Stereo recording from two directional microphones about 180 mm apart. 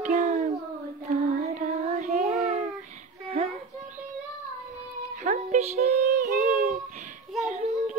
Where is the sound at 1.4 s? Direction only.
40° right (ahead or behind).